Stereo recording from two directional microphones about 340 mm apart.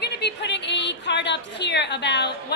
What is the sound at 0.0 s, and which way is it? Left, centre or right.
A woman's voice, left.